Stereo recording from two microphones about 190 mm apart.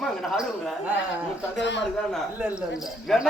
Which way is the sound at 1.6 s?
70° left (ahead or behind).